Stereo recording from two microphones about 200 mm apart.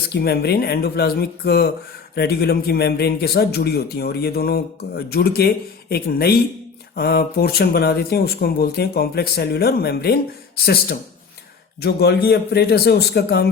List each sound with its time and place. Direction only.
0.1 s a man's voice: 50° left (ahead or behind)